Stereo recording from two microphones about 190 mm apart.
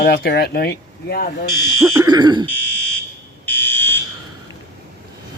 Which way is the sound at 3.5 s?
10° left (ahead or behind).